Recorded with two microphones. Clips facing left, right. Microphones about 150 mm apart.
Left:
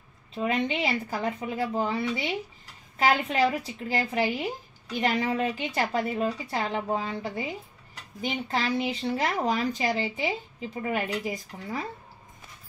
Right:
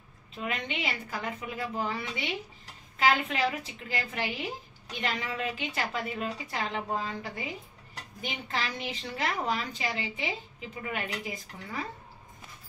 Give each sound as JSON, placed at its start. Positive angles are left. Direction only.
{"t": 0.3, "sound": "a woman's voice", "side_deg": 35}